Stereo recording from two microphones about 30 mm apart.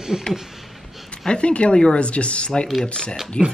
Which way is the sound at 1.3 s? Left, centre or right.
Left.